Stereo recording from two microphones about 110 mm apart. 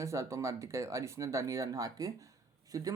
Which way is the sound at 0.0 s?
25° right (ahead or behind).